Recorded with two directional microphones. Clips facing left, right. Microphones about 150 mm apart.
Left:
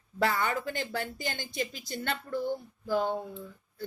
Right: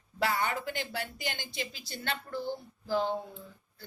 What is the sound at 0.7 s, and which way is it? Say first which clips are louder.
Speech: left 2 dB; 45° left (ahead or behind).